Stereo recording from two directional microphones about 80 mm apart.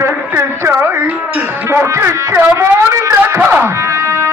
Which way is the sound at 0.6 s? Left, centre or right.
Right.